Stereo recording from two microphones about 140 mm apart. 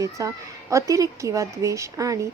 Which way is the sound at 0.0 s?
25° right (ahead or behind).